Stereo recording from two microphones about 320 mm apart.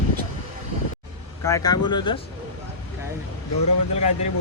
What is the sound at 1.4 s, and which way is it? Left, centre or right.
Speech, centre.